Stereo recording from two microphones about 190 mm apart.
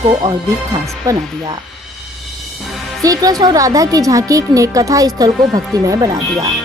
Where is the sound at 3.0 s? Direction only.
20° right (ahead or behind).